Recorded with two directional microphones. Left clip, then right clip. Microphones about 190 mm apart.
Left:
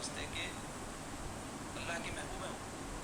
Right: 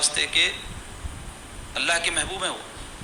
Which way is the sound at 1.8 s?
45° right (ahead or behind).